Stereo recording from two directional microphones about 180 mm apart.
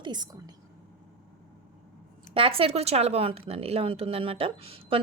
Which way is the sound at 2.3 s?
30° right (ahead or behind).